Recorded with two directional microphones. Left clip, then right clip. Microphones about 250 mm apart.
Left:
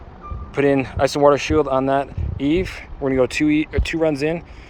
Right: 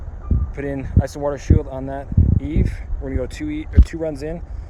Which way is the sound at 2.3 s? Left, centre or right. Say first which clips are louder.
Left 13 dB; centre.